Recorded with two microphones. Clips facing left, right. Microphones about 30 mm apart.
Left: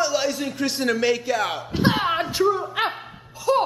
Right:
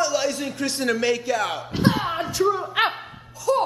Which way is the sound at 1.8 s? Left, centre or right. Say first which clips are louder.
Left 1 dB; left.